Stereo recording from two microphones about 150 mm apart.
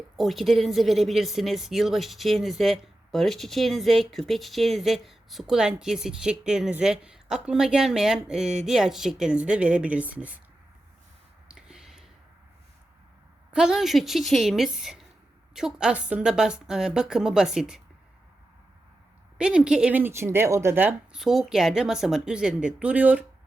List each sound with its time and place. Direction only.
0.2 s a woman's voice: centre (ahead or behind)
11.4 s a sound: 5° right (ahead or behind)
13.5 s a woman's voice: 5° right (ahead or behind)
19.4 s speech: 5° right (ahead or behind)
21.2 s a woman's voice: centre (ahead or behind)